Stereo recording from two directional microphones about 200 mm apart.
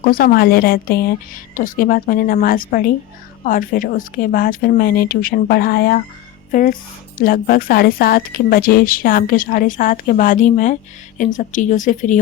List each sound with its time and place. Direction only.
0.0 s a woman's voice: 50° left (ahead or behind)